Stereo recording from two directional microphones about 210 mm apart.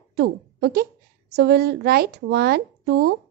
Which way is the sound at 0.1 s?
50° right (ahead or behind).